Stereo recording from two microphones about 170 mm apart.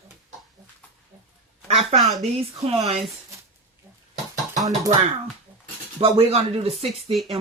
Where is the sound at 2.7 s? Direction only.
40° right (ahead or behind).